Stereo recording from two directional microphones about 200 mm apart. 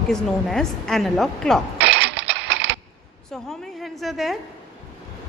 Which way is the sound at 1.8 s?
60° right (ahead or behind).